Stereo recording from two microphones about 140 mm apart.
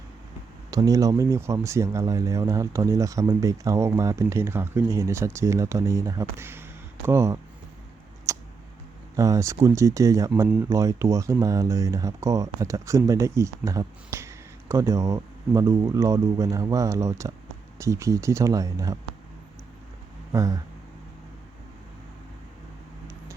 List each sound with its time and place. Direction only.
0.7 s speech: 25° right (ahead or behind)
8.3 s tick: 20° right (ahead or behind)
9.1 s speech: 25° right (ahead or behind)
20.3 s speech: 25° right (ahead or behind)